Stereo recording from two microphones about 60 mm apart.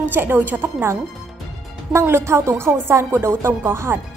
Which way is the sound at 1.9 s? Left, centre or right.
Right.